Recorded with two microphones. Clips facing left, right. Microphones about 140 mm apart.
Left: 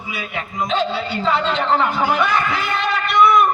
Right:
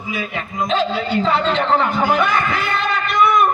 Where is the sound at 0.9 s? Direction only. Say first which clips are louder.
Right 2 dB; 45° right (ahead or behind).